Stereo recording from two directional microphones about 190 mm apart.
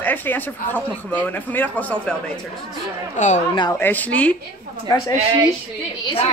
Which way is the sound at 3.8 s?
10° left (ahead or behind).